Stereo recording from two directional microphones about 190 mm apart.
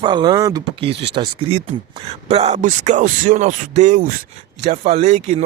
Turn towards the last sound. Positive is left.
turn(degrees=-40)  # may be behind; listen again after turning